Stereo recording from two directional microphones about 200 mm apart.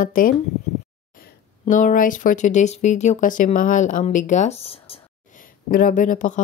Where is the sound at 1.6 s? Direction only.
40° left (ahead or behind).